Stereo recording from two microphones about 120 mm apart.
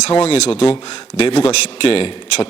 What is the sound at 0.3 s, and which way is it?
Speech, 65° left (ahead or behind).